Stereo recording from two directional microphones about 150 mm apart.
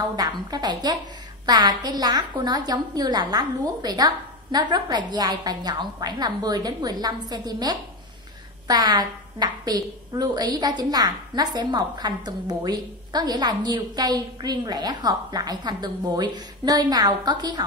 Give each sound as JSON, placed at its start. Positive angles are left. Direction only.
{"t": 0.1, "sound": "a woman's voice", "side_deg": -25}